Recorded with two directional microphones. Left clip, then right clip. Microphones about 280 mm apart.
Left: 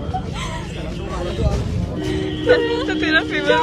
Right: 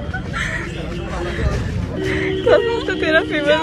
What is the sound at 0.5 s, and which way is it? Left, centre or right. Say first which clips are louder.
Music: right 4 dB; centre.